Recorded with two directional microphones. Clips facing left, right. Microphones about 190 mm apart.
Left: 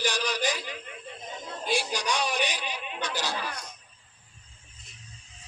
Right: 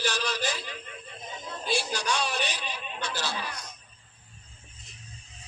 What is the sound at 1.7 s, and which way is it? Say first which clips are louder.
A man's voice: left 1 dB; 15° left (ahead or behind).